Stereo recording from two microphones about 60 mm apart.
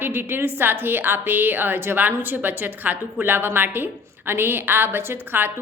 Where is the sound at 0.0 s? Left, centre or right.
Right.